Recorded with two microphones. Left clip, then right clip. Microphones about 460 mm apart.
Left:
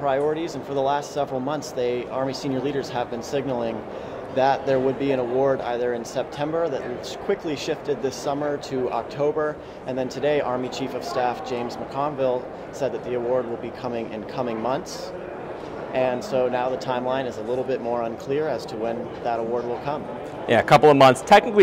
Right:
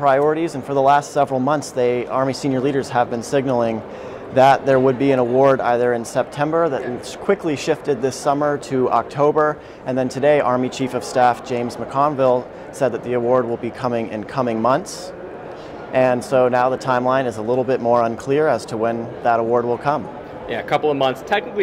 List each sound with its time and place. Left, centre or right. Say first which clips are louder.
0.0 s speech: right 7 dB; right
15.9 s speech: right 7 dB; right
20.4 s a man's voice: left 5 dB; left